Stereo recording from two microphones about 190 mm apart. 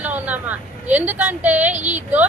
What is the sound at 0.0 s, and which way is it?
A woman's voice, 10° right (ahead or behind).